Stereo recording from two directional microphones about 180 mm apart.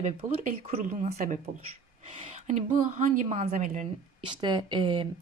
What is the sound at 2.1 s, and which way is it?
A woman's voice, 30° right (ahead or behind).